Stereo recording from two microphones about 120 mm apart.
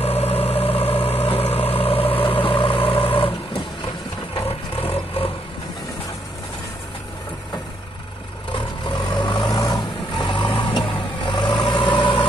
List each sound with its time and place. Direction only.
0.0 s vehicle: 55° left (ahead or behind)
4.4 s a sound: 50° left (ahead or behind)
8.5 s vehicle: 45° left (ahead or behind)